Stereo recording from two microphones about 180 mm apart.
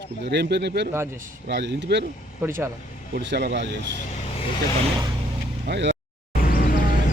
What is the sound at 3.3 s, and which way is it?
Speech, 70° right (ahead or behind).